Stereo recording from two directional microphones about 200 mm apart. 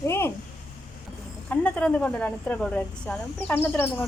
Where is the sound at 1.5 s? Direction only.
5° left (ahead or behind).